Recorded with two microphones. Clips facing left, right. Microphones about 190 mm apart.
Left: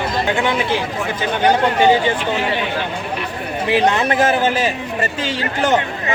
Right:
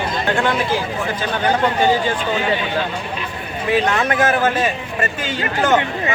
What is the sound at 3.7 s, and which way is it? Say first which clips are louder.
Speech: left 1 dB; 30° left (ahead or behind).